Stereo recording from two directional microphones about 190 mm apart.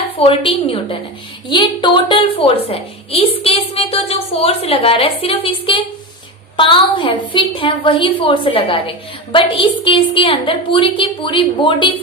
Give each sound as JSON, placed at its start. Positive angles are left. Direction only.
{"t": 0.3, "sound": "a woman's voice", "side_deg": 30}